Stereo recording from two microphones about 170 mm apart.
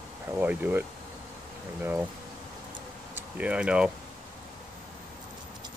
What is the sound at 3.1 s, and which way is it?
Speech, 10° right (ahead or behind).